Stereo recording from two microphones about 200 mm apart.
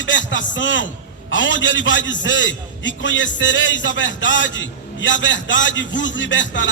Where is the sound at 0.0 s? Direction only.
65° left (ahead or behind).